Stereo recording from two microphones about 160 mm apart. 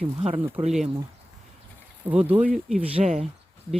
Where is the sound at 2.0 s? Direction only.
10° right (ahead or behind).